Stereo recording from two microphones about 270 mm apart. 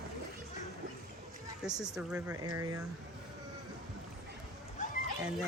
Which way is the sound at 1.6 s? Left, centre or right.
Centre.